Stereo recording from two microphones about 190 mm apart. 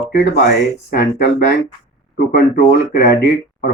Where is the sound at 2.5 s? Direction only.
50° left (ahead or behind).